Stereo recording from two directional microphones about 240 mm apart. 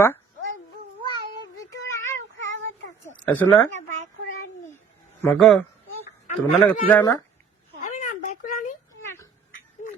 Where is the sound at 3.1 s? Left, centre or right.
Centre.